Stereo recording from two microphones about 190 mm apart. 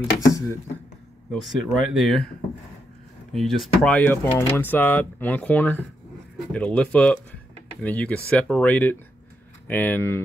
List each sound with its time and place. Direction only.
0.2 s speech: 15° left (ahead or behind)
1.3 s speech: centre (ahead or behind)
3.3 s speech: centre (ahead or behind)